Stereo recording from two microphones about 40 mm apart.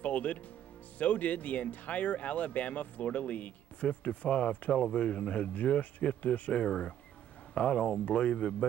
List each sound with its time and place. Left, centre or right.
0.0 s music: left
0.9 s speech: left